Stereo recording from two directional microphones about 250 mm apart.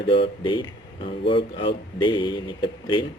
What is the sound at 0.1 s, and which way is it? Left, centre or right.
Speech, centre.